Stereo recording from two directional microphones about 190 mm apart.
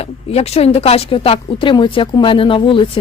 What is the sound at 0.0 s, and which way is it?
Speech, 30° left (ahead or behind).